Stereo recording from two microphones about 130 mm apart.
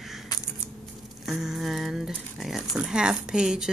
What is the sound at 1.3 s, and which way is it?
Speech, 5° right (ahead or behind).